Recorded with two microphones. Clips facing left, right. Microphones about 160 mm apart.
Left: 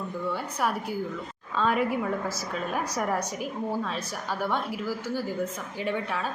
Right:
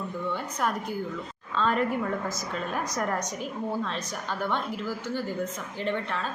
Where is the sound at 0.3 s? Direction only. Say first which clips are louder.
Left 1 dB; 10° left (ahead or behind).